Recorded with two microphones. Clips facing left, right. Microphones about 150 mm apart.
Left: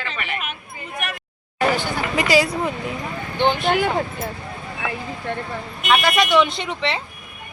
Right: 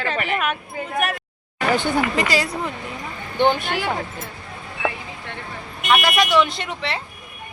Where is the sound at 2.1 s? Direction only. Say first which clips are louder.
Left 3 dB; 5° left (ahead or behind).